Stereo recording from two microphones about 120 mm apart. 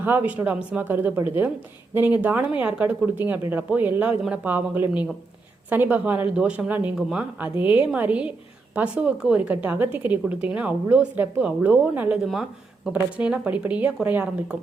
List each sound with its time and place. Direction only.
0.0 s a woman's voice: 15° right (ahead or behind)